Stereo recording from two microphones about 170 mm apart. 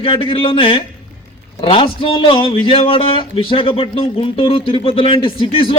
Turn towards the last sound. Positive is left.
turn(degrees=30)  # may be behind; listen again after turning